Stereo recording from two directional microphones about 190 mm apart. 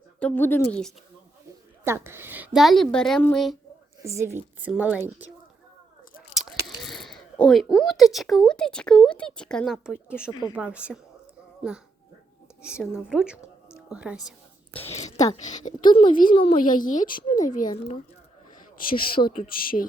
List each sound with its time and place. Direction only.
0.2 s a woman's voice: 10° left (ahead or behind)
1.8 s a woman's voice: 15° right (ahead or behind)
4.0 s speech: 15° right (ahead or behind)
6.3 s a sound: centre (ahead or behind)
6.7 s speech: centre (ahead or behind)
10.5 s speech: 5° right (ahead or behind)
12.6 s a woman's voice: 5° right (ahead or behind)
14.8 s a sound: 30° left (ahead or behind)
15.4 s a woman's voice: 40° left (ahead or behind)
16.3 s speech: 30° left (ahead or behind)
16.6 s a woman's voice: 45° left (ahead or behind)
18.9 s a woman's voice: 50° left (ahead or behind)